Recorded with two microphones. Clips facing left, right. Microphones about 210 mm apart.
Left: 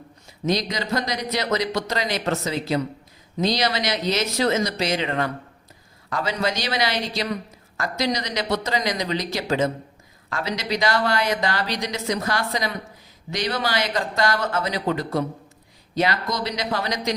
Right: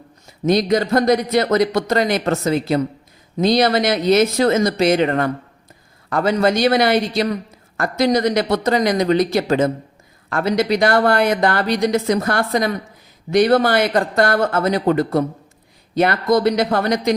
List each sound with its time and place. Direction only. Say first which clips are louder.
0.4 s speech: right 8 dB; 55° right (ahead or behind)